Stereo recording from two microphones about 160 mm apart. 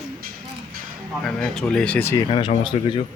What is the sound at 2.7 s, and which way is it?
Speech, 40° left (ahead or behind).